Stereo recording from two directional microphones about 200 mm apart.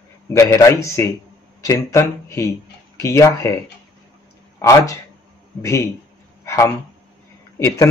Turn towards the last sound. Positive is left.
turn(degrees=15)  # may be behind; listen again after turning